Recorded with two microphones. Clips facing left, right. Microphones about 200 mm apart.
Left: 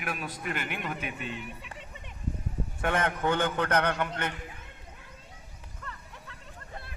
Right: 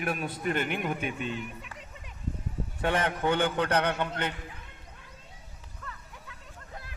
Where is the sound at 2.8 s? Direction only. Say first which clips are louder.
Right 1 dB; 20° right (ahead or behind).